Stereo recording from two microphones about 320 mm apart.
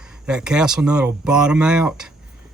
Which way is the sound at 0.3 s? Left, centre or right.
Centre.